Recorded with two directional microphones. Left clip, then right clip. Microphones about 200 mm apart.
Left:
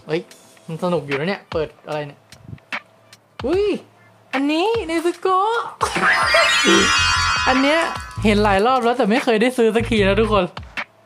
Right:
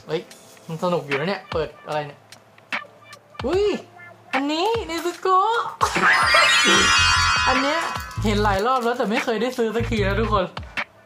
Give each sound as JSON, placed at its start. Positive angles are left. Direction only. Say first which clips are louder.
{"t": 0.1, "sound": "speech", "louder": "left 3 dB", "side_deg": 45}
{"t": 3.5, "sound": "speech", "louder": "left 1 dB", "side_deg": 40}
{"t": 5.9, "sound": "speech", "louder": "left 1 dB", "side_deg": 0}
{"t": 7.9, "sound": "music", "louder": "left 1 dB", "side_deg": 0}
{"t": 8.2, "sound": "speech", "louder": "left 5 dB", "side_deg": 50}
{"t": 10.5, "sound": "music", "louder": "even", "side_deg": 0}